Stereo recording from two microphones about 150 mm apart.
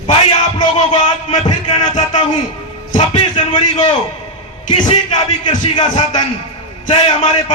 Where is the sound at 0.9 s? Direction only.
50° left (ahead or behind).